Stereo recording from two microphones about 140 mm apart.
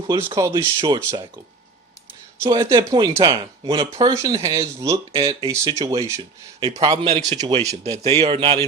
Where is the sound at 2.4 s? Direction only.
20° right (ahead or behind).